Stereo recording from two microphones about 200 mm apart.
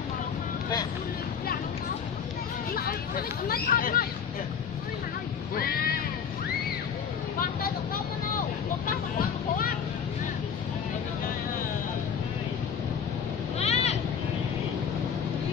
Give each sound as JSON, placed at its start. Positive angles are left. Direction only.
{"t": 2.7, "sound": "speech", "side_deg": 45}
{"t": 5.6, "sound": "a sound", "side_deg": 45}
{"t": 7.3, "sound": "vehicle", "side_deg": 45}
{"t": 13.6, "sound": "vehicle", "side_deg": 30}